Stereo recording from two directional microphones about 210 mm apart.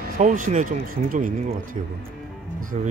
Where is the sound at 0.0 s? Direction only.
40° right (ahead or behind).